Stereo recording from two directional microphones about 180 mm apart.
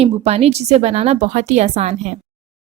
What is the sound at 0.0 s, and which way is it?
A woman's voice, 35° right (ahead or behind).